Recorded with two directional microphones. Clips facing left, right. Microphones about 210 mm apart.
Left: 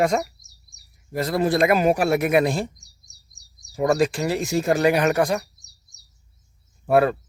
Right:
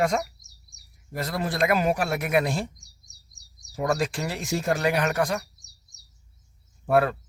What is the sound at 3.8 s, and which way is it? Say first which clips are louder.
Speech: left 6 dB; 5° left (ahead or behind).